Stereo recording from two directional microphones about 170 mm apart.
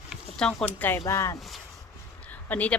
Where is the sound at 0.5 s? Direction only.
15° left (ahead or behind).